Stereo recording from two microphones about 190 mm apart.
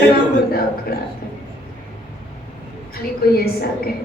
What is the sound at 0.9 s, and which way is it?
Speech, 55° left (ahead or behind).